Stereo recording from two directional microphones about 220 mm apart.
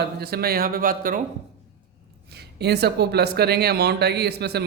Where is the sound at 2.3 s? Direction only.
50° right (ahead or behind).